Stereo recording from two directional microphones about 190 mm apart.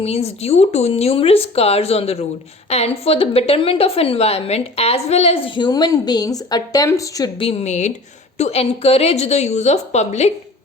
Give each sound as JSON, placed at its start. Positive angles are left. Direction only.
{"t": 0.0, "sound": "a woman's voice", "side_deg": 35}
{"t": 7.3, "sound": "a woman's voice", "side_deg": 30}